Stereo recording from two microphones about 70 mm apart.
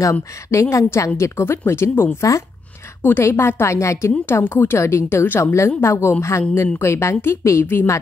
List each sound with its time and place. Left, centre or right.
0.0 s a woman's voice: left